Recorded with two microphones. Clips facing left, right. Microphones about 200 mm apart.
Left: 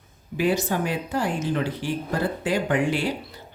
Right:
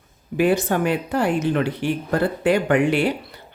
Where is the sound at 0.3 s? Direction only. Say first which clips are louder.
Right 4 dB; 55° right (ahead or behind).